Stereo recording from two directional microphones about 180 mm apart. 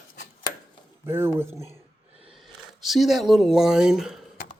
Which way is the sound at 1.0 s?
15° right (ahead or behind).